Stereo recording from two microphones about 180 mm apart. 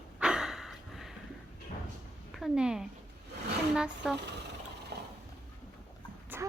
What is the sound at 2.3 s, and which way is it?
A woman's voice, centre (ahead or behind).